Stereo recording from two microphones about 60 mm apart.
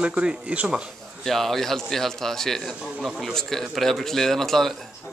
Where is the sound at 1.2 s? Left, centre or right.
Centre.